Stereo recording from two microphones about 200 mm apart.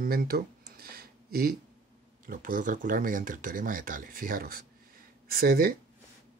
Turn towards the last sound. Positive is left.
turn(degrees=-45)  # may be behind; listen again after turning